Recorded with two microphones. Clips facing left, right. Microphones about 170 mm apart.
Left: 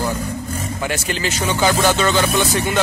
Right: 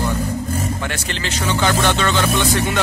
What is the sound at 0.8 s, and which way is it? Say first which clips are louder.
Speech: left 3 dB; 10° left (ahead or behind).